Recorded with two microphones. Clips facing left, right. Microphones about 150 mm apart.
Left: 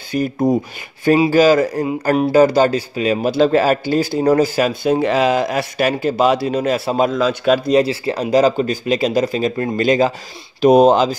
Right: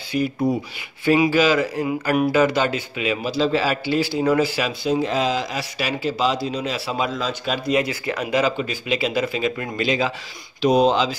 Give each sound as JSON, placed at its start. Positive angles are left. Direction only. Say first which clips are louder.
{"t": 0.1, "sound": "speech", "louder": "left 5 dB", "side_deg": 45}
{"t": 3.3, "sound": "speech", "louder": "left 7 dB", "side_deg": 55}
{"t": 7.7, "sound": "speech", "louder": "left 7 dB", "side_deg": 30}